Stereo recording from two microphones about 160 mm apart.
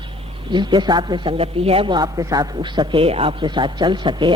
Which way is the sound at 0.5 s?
30° right (ahead or behind).